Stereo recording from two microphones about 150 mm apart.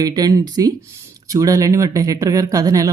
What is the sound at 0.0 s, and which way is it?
Speech, 25° right (ahead or behind).